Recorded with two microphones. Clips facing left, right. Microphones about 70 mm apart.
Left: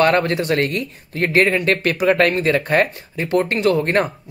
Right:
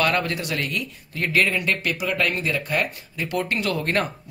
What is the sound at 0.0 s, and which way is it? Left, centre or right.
Speech, left.